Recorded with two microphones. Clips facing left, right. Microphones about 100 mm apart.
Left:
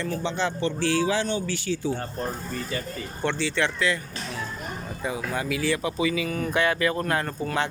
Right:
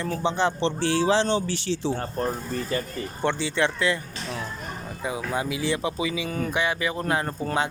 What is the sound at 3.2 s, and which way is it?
Speech, 15° right (ahead or behind).